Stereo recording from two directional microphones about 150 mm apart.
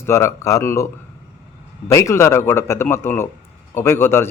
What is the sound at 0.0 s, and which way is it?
Speech, 20° left (ahead or behind).